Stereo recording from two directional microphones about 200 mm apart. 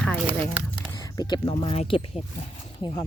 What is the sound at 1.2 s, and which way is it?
Speech, 20° left (ahead or behind).